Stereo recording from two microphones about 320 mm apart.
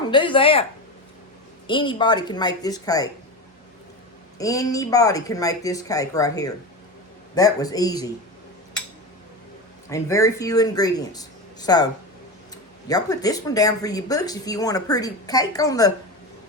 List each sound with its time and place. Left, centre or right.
0.1 s speech: centre
1.6 s speech: centre
4.4 s speech: centre
9.9 s speech: centre
12.9 s speech: centre